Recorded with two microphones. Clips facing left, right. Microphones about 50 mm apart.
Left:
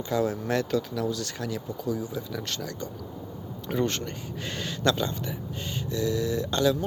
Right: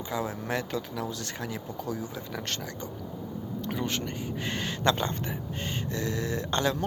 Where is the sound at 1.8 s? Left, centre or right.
Right.